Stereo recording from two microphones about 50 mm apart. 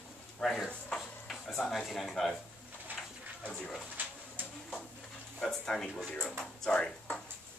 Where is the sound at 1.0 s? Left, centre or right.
Centre.